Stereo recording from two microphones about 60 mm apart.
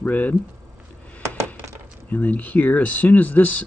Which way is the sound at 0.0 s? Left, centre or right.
Left.